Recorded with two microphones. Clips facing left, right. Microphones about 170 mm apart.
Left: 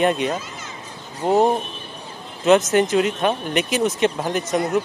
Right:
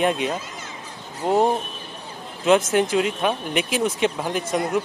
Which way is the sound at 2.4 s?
5° right (ahead or behind).